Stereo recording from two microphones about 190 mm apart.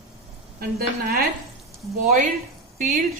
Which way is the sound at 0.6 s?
55° right (ahead or behind).